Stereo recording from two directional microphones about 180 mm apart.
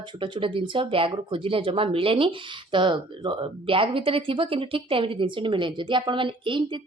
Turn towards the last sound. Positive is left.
turn(degrees=-25)  # may be behind; listen again after turning